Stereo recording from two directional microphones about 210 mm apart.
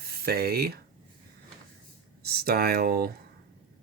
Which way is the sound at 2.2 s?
50° right (ahead or behind).